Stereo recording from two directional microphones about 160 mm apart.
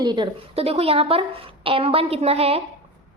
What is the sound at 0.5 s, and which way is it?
A woman's voice, 40° right (ahead or behind).